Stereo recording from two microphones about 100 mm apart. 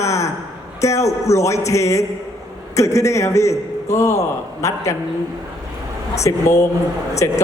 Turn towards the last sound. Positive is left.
turn(degrees=30)  # may be behind; listen again after turning